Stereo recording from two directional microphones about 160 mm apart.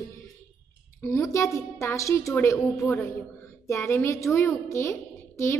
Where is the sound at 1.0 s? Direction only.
20° left (ahead or behind).